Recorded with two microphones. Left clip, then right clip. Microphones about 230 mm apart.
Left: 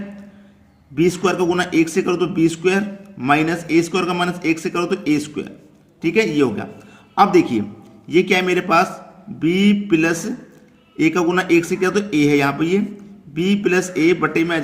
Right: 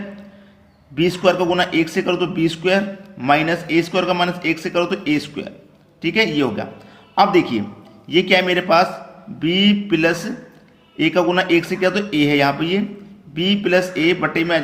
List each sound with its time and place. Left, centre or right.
0.9 s speech: left